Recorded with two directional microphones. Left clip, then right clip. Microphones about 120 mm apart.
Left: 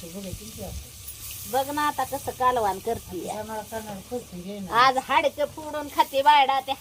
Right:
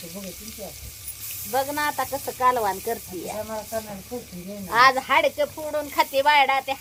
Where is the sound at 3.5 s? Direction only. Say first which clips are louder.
Right 3 dB; 55° left (ahead or behind).